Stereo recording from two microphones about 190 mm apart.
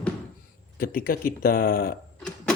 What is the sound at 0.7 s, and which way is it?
Speech, 50° left (ahead or behind).